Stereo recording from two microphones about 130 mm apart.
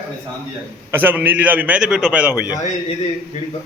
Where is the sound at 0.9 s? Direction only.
15° right (ahead or behind).